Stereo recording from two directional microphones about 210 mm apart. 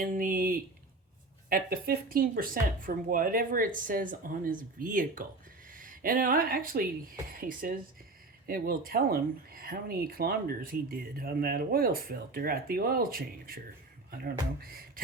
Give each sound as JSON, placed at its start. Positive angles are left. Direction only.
{"t": 0.0, "sound": "speech", "side_deg": -40}